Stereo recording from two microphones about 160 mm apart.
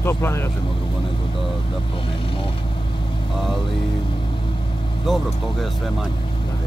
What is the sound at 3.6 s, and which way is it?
Vehicle, 30° left (ahead or behind).